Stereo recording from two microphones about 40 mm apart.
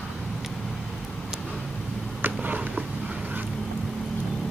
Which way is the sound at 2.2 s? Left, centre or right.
Right.